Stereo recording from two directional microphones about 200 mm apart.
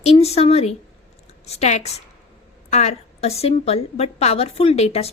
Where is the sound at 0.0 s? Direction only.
30° left (ahead or behind).